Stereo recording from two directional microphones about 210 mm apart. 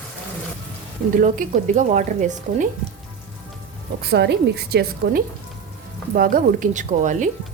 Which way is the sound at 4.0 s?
50° right (ahead or behind).